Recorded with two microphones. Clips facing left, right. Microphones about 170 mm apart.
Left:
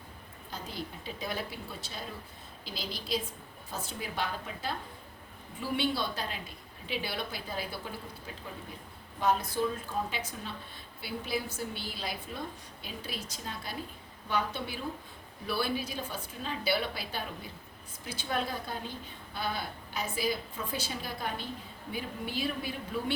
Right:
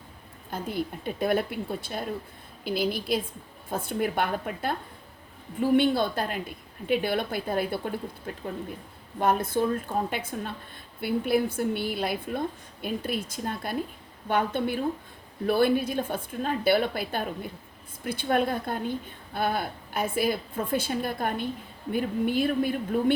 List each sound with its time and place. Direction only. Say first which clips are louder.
0.5 s a woman's voice: right 9 dB; 55° right (ahead or behind)